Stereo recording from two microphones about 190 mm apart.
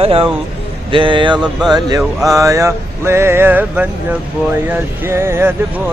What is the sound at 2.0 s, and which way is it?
Speech, centre (ahead or behind).